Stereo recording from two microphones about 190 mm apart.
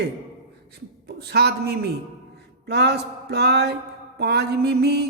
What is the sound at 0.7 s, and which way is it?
A man's voice, 60° right (ahead or behind).